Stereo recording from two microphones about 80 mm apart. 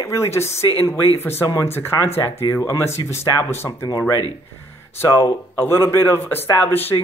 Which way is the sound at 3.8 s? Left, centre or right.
Left.